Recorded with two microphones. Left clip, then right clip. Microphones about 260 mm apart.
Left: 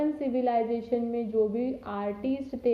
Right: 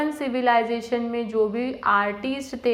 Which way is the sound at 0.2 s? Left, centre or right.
Centre.